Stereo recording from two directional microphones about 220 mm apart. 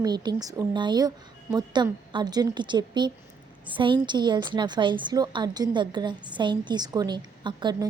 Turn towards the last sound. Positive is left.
turn(degrees=-20)  # may be behind; listen again after turning